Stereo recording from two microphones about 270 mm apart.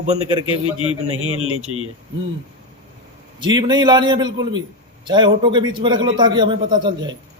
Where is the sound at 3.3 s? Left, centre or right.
Centre.